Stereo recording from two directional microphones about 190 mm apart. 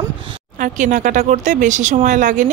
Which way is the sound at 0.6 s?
40° right (ahead or behind).